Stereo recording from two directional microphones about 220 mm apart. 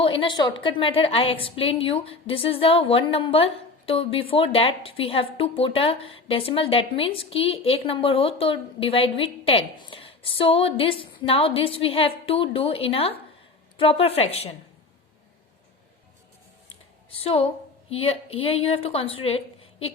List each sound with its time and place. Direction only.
0.0 s a woman's voice: 25° left (ahead or behind)
17.1 s speech: 25° left (ahead or behind)